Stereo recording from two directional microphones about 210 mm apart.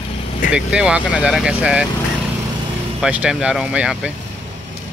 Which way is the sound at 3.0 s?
5° right (ahead or behind).